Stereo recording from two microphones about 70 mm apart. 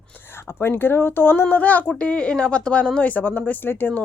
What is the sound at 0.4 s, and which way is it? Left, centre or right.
Speech, left.